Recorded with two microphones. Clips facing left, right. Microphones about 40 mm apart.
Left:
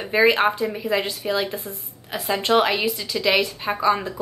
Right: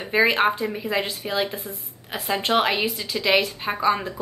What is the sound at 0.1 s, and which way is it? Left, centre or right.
A woman's voice, centre.